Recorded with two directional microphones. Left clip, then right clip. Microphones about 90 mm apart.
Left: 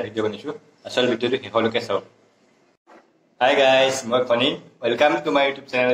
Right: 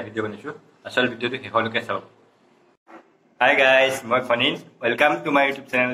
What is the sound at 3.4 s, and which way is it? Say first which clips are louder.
Speech: even; 30° left (ahead or behind).